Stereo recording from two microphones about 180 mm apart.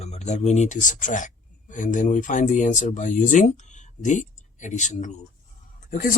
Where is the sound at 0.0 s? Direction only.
40° left (ahead or behind).